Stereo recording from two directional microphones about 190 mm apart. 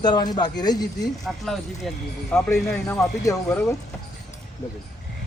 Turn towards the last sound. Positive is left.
turn(degrees=10)  # may be behind; listen again after turning